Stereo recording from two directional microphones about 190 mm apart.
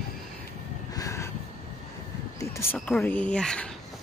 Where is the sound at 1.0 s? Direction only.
15° left (ahead or behind).